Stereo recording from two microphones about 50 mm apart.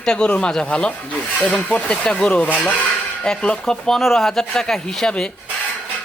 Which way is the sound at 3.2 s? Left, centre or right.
Centre.